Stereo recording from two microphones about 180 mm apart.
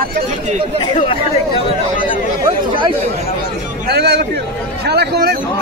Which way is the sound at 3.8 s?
60° right (ahead or behind).